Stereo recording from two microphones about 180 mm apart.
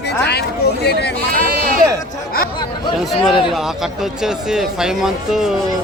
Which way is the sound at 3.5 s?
Centre (ahead or behind).